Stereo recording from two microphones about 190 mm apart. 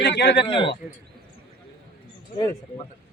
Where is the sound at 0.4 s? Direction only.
25° left (ahead or behind).